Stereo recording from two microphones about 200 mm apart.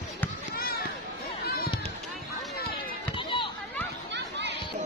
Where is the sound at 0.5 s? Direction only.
50° left (ahead or behind).